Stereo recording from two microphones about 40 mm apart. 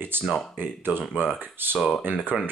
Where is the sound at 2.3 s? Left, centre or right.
Centre.